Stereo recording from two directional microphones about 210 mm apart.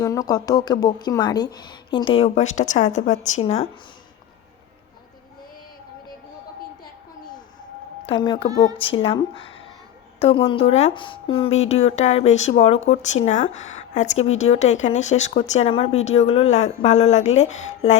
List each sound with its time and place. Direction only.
0.0 s a woman's voice: 15° left (ahead or behind); by 3.7 s 30° left (ahead or behind)
8.1 s a woman's voice: 20° left (ahead or behind)